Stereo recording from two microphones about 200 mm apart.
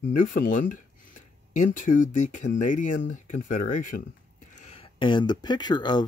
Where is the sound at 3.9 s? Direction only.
65° left (ahead or behind).